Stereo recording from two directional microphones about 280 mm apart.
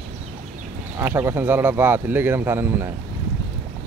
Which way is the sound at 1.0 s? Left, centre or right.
Centre.